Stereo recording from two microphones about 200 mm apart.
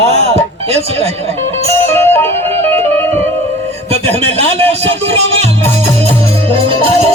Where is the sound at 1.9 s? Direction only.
10° left (ahead or behind).